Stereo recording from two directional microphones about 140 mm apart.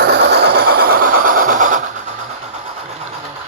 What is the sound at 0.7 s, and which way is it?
Train, 90° right.